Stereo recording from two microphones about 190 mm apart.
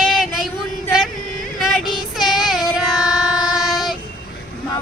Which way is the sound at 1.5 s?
Centre (ahead or behind).